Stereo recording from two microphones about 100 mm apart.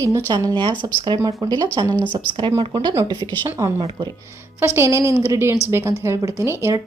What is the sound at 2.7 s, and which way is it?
Speech, 50° right (ahead or behind).